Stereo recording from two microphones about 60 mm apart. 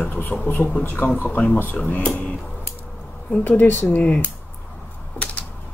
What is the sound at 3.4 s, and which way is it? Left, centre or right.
Speech, left.